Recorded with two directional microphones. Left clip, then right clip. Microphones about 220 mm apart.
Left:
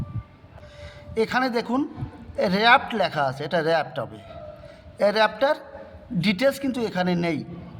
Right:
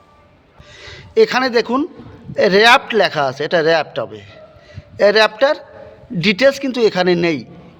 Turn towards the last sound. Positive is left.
turn(degrees=-20)  # may be behind; listen again after turning